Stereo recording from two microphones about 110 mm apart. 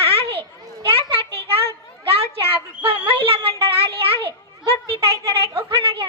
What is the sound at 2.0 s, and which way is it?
A child's voice, 60° right (ahead or behind).